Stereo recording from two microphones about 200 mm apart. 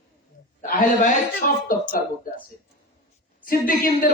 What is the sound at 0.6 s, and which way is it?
A man's voice, 45° left (ahead or behind).